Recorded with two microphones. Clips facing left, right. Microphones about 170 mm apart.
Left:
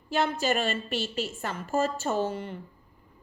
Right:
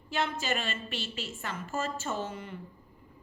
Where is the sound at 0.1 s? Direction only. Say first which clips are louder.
Left 5 dB; 40° left (ahead or behind).